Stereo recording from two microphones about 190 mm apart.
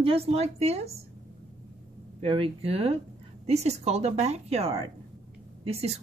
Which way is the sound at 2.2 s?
30° right (ahead or behind).